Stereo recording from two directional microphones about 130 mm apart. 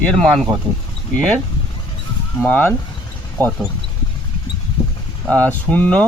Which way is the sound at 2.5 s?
15° left (ahead or behind).